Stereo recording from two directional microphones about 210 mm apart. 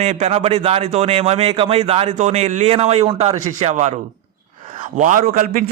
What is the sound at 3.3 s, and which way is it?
Speech, 90° right.